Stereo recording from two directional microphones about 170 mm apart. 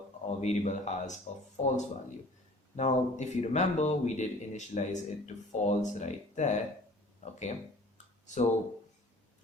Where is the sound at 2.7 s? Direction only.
40° left (ahead or behind).